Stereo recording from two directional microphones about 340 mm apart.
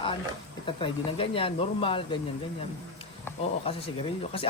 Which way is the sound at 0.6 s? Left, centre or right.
Centre.